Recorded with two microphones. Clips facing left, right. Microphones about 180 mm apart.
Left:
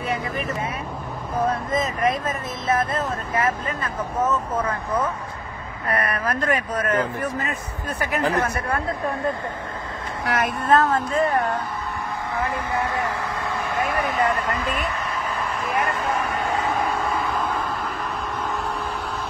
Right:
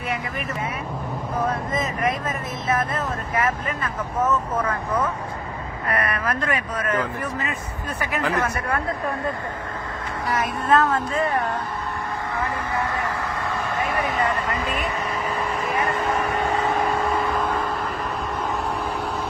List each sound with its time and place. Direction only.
2.7 s speech: 30° left (ahead or behind)
5.9 s speech: 40° left (ahead or behind)
10.2 s speech: 65° left (ahead or behind)
10.7 s speech: 35° left (ahead or behind)
12.7 s speech: 15° left (ahead or behind)
13.9 s vehicle: centre (ahead or behind)